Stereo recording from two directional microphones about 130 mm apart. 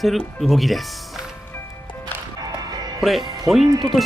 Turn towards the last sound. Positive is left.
turn(degrees=0)  # may be behind; listen again after turning